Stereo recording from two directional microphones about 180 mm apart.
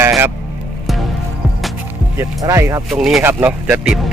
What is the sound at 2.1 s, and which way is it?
Speech, 15° right (ahead or behind).